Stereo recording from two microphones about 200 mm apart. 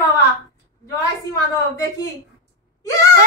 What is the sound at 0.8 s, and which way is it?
A woman's voice, 15° left (ahead or behind).